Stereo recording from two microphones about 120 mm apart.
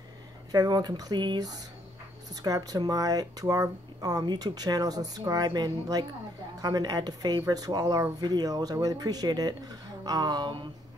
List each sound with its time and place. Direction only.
0.5 s speech: 35° right (ahead or behind)